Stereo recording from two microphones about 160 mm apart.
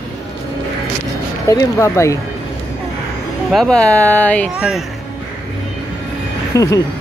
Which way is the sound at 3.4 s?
5° left (ahead or behind).